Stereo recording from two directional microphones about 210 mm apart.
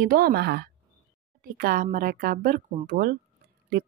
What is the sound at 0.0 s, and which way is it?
Speech, 45° right (ahead or behind).